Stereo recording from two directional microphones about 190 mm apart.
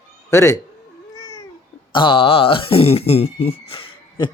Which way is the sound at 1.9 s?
25° left (ahead or behind).